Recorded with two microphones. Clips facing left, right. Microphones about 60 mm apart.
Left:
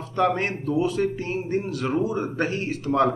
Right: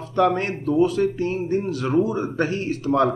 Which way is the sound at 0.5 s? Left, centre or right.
Right.